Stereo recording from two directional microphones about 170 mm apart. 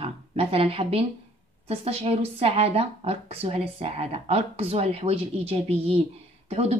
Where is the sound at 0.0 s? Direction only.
35° right (ahead or behind).